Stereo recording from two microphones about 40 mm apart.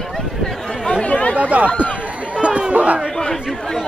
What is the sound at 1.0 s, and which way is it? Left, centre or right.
Chatter, left.